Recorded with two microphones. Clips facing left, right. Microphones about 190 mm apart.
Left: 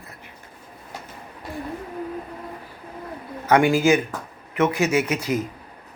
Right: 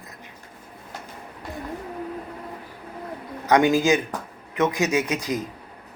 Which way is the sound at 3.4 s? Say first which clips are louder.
Left 1 dB; 15° right (ahead or behind).